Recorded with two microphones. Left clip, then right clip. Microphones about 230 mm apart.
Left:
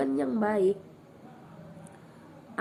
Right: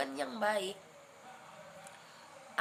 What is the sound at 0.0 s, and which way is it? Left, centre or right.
Speech, centre.